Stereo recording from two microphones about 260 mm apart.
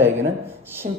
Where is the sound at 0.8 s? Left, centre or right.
Right.